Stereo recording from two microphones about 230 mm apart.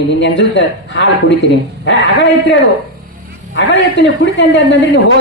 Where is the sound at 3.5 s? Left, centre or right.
Left.